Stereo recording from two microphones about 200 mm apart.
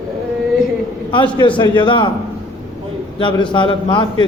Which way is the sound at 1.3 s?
25° left (ahead or behind).